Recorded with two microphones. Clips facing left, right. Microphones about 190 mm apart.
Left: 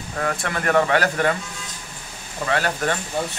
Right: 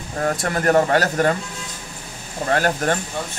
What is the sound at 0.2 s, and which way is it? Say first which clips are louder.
Speech: right 4 dB; 40° right (ahead or behind).